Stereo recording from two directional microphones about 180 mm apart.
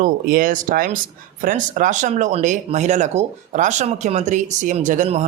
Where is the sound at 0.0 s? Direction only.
50° right (ahead or behind).